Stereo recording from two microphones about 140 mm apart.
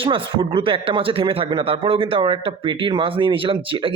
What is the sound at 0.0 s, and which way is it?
Speech, 40° right (ahead or behind).